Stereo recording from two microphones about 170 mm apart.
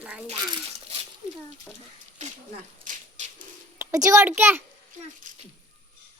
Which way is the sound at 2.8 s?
35° right (ahead or behind).